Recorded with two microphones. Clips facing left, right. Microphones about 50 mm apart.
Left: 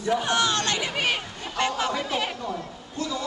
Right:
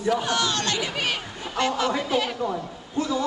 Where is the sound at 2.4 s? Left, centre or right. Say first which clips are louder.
Right 4 dB; centre.